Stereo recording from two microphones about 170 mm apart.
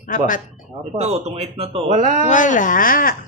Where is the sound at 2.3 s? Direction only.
50° left (ahead or behind).